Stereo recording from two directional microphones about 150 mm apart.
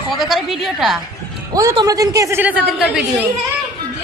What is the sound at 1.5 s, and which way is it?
Speech, 25° right (ahead or behind).